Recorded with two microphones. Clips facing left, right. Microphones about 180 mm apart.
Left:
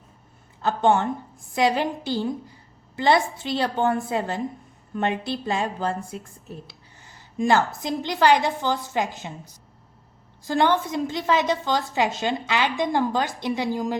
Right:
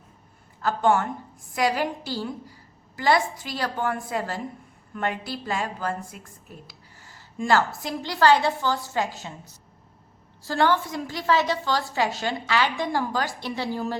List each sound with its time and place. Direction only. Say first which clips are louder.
0.6 s a woman's voice: left 2 dB; 20° left (ahead or behind)
10.4 s a woman's voice: left 2 dB; 20° left (ahead or behind)